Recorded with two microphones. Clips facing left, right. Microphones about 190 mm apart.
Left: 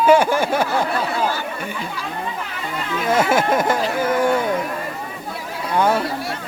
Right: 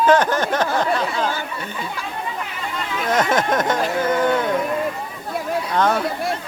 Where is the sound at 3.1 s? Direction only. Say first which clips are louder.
Left 2 dB; 10° left (ahead or behind).